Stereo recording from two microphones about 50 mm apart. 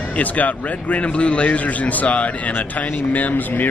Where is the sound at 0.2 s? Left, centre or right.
Left.